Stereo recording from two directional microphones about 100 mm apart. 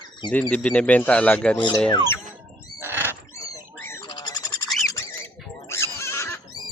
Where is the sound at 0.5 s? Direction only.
10° left (ahead or behind).